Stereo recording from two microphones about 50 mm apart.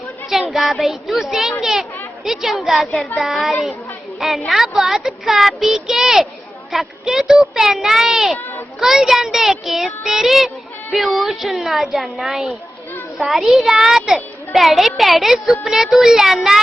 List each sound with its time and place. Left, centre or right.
0.5 s a child's voice: centre
1.6 s children playing: centre
2.2 s a child's voice: centre
8.4 s a child's voice: left
8.8 s a child's voice: centre